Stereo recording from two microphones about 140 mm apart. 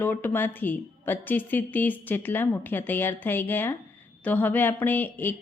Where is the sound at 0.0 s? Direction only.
15° left (ahead or behind).